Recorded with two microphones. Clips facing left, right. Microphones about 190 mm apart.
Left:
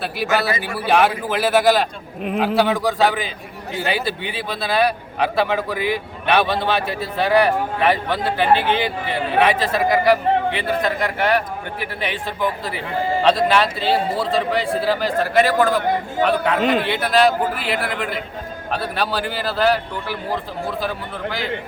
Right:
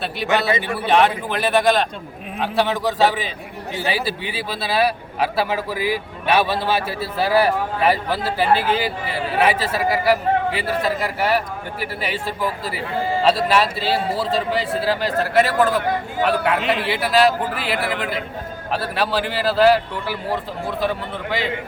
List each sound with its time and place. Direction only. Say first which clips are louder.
0.0 s a man's voice: even; centre (ahead or behind)
5.7 s a man's voice: even; 35° right (ahead or behind)
6.2 s a man's voice: left 1 dB; 5° right (ahead or behind)
16.6 s a man's voice: left 4 dB; 45° left (ahead or behind)
16.8 s a man's voice: even; 5° right (ahead or behind)